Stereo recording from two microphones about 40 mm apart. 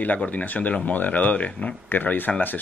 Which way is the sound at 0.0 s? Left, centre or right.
Left.